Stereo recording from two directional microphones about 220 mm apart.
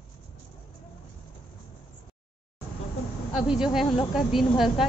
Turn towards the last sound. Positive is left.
turn(degrees=0)  # may be behind; listen again after turning